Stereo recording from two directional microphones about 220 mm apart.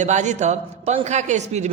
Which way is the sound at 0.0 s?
35° right (ahead or behind).